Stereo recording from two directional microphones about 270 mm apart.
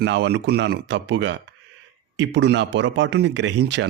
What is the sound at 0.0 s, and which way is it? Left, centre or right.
Speech, right.